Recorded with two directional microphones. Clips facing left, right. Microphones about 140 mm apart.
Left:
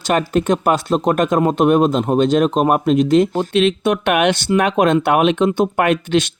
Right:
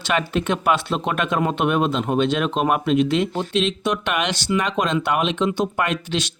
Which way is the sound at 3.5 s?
60° left (ahead or behind).